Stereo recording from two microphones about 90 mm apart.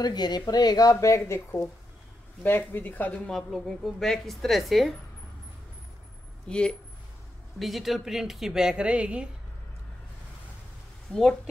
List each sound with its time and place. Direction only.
0.0 s speech: 50° left (ahead or behind); by 3.4 s 10° left (ahead or behind)
3.4 s a woman's voice: centre (ahead or behind)
6.5 s speech: 10° left (ahead or behind)
7.5 s a woman's voice: centre (ahead or behind)
11.1 s speech: 5° left (ahead or behind)